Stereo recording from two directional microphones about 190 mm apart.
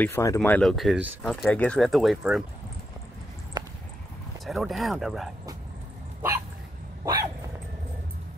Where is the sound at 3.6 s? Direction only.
20° right (ahead or behind).